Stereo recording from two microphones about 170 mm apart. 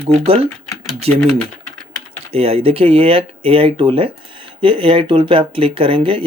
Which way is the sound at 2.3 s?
35° right (ahead or behind).